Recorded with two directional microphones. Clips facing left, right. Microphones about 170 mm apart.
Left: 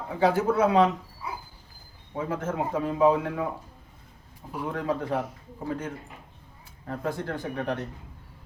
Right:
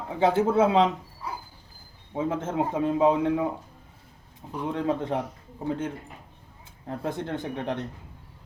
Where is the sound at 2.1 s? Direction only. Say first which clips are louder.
Right 2 dB; 25° right (ahead or behind).